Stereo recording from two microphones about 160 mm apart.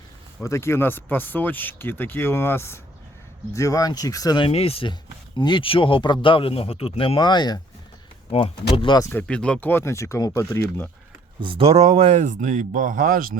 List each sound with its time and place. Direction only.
0.4 s speech: 15° left (ahead or behind)
9.0 s speech: 10° left (ahead or behind)
11.3 s speech: 35° right (ahead or behind); by 13.3 s 65° right (ahead or behind)